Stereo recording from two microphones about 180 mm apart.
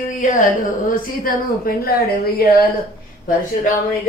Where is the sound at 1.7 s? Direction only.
55° left (ahead or behind).